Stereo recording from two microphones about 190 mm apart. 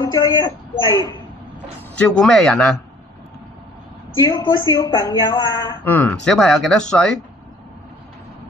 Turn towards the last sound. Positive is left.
turn(degrees=5)  # may be behind; listen again after turning